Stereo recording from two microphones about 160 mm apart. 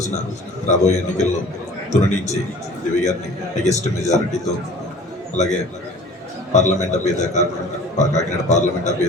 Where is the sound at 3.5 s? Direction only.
45° left (ahead or behind).